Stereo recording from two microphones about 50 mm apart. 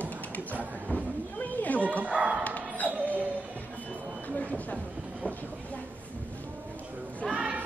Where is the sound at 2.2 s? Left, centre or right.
Centre.